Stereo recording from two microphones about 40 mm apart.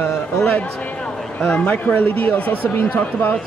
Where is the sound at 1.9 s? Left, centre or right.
Left.